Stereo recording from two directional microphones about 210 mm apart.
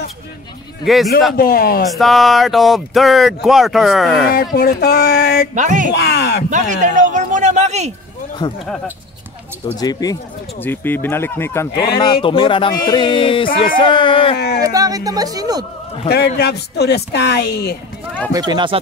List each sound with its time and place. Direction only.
0.8 s speech: centre (ahead or behind)
1.3 s speech: 45° left (ahead or behind)
1.9 s speech: centre (ahead or behind)
4.3 s speech: 45° left (ahead or behind)
5.5 s speech: 35° right (ahead or behind)
5.9 s speech: 50° left (ahead or behind)
6.5 s speech: 35° right (ahead or behind)
8.4 s a sound: 20° left (ahead or behind)
9.7 s speech: 15° left (ahead or behind)
11.7 s speech: 50° left (ahead or behind)
12.0 s a sound: 20° left (ahead or behind)
14.6 s speech: 15° right (ahead or behind)
16.1 s speech: 50° left (ahead or behind)
18.3 s speech: 20° right (ahead or behind)